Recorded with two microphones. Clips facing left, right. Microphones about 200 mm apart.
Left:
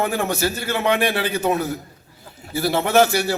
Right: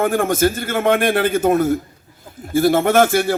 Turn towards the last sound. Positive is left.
turn(degrees=-50)  # may be behind; listen again after turning